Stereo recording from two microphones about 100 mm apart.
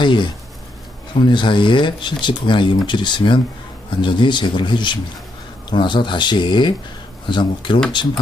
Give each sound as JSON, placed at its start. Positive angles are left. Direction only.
{"t": 0.0, "sound": "speech", "side_deg": 50}